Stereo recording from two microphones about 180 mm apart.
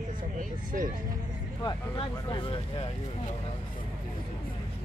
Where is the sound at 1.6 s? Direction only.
25° left (ahead or behind).